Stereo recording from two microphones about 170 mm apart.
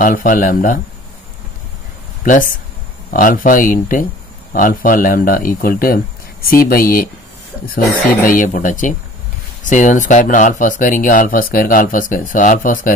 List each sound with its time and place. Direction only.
0.0 s speech: 50° left (ahead or behind)
2.2 s speech: 50° left (ahead or behind)